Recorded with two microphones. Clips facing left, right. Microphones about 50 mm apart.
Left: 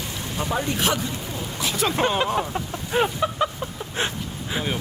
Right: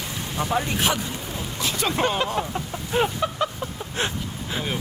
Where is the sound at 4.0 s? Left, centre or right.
Left.